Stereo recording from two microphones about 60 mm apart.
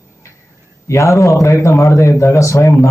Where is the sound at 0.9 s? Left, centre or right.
Left.